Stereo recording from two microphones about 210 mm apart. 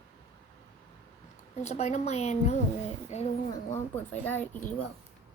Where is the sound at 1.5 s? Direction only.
35° left (ahead or behind).